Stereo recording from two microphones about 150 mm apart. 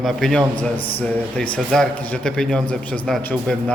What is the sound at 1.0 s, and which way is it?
Speech, 10° left (ahead or behind).